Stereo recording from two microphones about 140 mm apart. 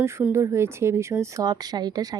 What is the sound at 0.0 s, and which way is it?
Speech, 15° right (ahead or behind).